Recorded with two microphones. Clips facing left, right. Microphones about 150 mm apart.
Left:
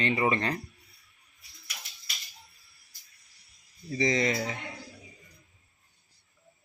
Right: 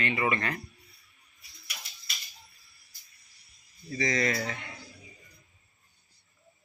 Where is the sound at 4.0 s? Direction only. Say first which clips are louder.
Left 2 dB; 25° left (ahead or behind).